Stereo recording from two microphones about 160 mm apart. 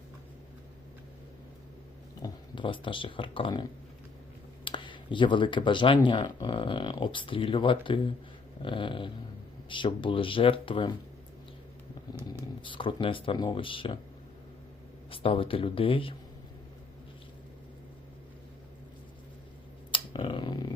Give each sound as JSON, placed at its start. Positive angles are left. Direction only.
{"t": 2.2, "sound": "speech", "side_deg": 30}
{"t": 12.6, "sound": "speech", "side_deg": 30}
{"t": 15.1, "sound": "speech", "side_deg": 35}
{"t": 19.9, "sound": "a sound", "side_deg": 30}